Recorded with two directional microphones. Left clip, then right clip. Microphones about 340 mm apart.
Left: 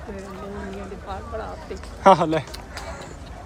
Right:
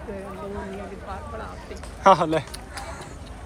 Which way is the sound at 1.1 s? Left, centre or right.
Centre.